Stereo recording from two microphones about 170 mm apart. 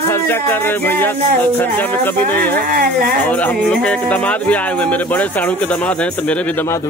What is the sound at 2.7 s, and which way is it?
Speech, 55° right (ahead or behind).